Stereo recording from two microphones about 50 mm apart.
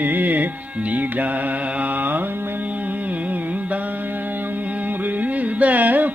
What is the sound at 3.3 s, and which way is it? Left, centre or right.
Carnatic music, right.